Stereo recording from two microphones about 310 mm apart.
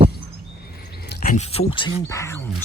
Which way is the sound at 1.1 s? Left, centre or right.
Left.